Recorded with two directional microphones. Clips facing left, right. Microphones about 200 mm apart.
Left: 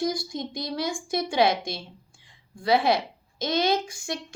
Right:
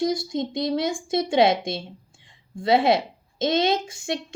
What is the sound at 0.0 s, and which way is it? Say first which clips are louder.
A woman's voice: right 4 dB; 25° right (ahead or behind).